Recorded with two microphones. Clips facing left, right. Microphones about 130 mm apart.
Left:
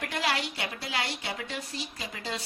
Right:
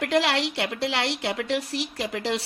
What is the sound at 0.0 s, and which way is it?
Speech, 75° right (ahead or behind).